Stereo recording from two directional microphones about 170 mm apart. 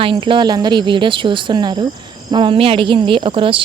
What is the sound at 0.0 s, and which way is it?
Speech, 30° right (ahead or behind).